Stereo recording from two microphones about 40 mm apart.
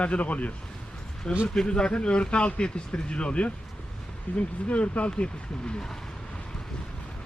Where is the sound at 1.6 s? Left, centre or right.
Left.